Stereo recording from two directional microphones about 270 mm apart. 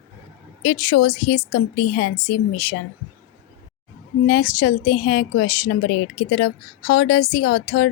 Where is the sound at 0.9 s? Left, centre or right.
Left.